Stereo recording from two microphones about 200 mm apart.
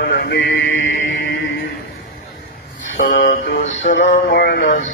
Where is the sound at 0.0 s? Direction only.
55° left (ahead or behind).